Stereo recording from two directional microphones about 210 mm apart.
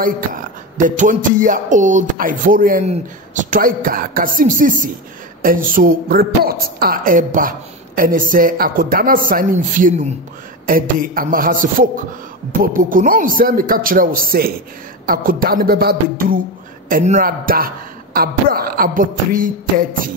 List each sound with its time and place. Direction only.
0.8 s a woman's voice: 40° right (ahead or behind)